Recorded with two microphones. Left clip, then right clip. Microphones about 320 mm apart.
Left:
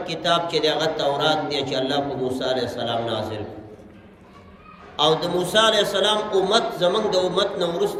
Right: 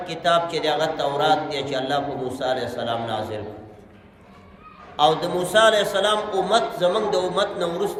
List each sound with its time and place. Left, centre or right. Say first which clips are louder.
0.1 s a man's voice: right 1 dB; centre
4.9 s a man's voice: right 1 dB; centre